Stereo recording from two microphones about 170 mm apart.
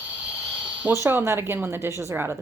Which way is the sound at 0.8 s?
15° right (ahead or behind).